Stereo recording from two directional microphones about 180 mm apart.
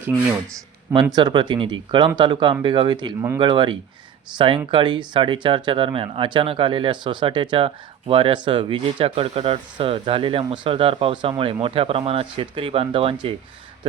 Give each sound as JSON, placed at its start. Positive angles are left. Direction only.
{"t": 1.1, "sound": "speech", "side_deg": -25}